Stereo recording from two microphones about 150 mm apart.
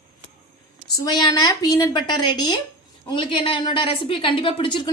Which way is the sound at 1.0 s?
30° left (ahead or behind).